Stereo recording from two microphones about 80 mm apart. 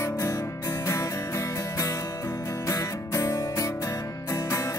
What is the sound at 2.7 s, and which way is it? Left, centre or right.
Music, left.